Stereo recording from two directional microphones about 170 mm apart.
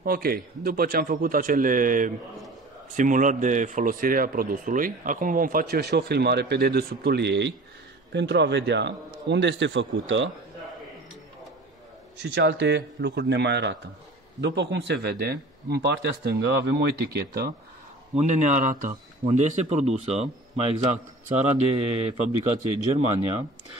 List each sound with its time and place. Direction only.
0.0 s a man's voice: 60° right (ahead or behind); by 10.3 s 90° right
12.2 s speech: 85° right; by 17.5 s 70° right (ahead or behind)
18.1 s a man's voice: 45° right (ahead or behind)